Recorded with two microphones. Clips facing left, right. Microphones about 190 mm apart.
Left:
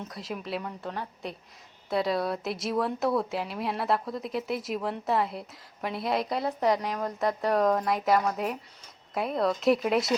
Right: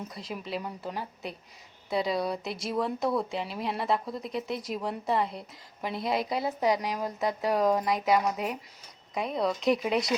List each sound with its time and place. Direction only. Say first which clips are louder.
0.0 s speech: left 1 dB; centre (ahead or behind)